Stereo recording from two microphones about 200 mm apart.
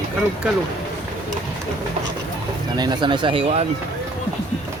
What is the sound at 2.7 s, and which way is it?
Speech, 20° right (ahead or behind).